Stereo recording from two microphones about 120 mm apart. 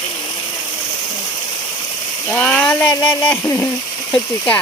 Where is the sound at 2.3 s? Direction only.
10° left (ahead or behind).